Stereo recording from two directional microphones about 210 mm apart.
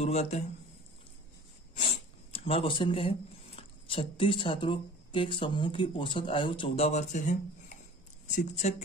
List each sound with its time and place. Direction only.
0.0 s speech: 30° left (ahead or behind)
2.3 s speech: 25° left (ahead or behind)